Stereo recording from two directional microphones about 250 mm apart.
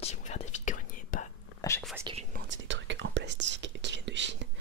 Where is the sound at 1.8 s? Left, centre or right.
Centre.